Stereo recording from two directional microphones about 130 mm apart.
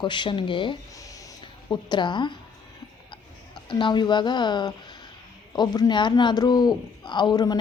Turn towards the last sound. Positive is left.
turn(degrees=30)  # may be behind; listen again after turning